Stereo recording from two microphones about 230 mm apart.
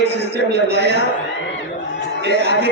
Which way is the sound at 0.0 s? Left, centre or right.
Right.